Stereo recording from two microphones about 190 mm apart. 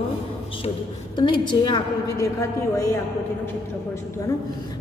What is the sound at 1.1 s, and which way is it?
A woman's voice, 25° left (ahead or behind).